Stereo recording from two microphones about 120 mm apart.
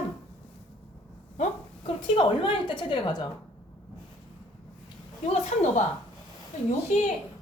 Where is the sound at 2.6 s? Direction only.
40° left (ahead or behind).